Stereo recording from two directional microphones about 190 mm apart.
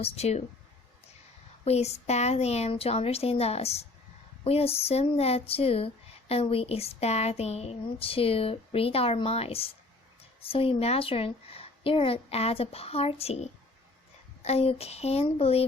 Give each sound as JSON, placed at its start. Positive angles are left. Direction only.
{"t": 0.0, "sound": "speech", "side_deg": 35}
{"t": 1.6, "sound": "speech", "side_deg": 35}